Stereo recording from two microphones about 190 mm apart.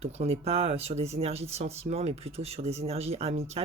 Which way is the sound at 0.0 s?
35° right (ahead or behind).